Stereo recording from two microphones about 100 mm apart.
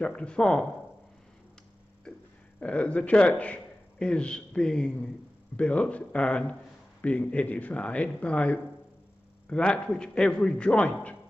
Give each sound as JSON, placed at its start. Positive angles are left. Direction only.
{"t": 0.0, "sound": "a man's voice", "side_deg": 10}
{"t": 2.6, "sound": "a man's voice", "side_deg": 15}